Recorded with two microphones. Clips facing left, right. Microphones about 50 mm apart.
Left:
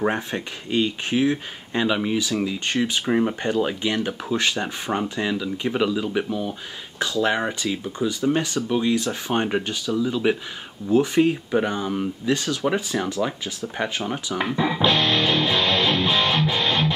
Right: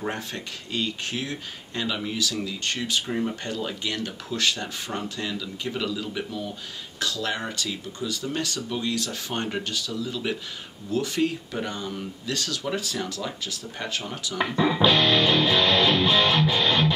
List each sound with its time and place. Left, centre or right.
0.0 s speech: left
14.4 s music: centre